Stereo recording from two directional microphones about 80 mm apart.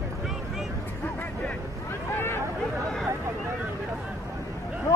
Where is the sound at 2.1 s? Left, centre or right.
Left.